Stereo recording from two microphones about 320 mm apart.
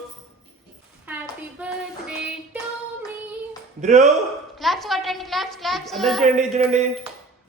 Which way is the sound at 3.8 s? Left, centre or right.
Right.